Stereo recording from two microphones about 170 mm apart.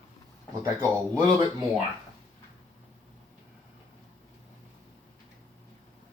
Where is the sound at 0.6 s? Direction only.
20° right (ahead or behind).